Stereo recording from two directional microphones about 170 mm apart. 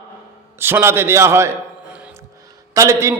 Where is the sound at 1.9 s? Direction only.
5° right (ahead or behind).